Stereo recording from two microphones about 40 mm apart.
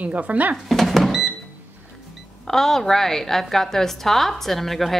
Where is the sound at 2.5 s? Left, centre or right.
Centre.